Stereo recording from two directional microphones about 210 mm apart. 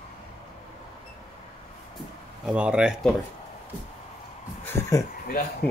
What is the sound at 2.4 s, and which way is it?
Speech, 5° right (ahead or behind).